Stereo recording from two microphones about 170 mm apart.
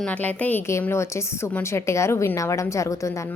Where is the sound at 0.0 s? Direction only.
10° left (ahead or behind).